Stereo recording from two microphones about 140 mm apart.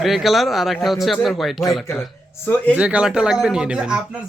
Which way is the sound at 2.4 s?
15° left (ahead or behind).